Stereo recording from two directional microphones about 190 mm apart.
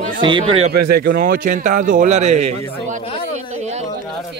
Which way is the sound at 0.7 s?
55° right (ahead or behind).